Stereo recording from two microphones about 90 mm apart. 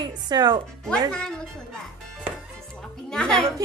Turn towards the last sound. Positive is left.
turn(degrees=5)  # may be behind; listen again after turning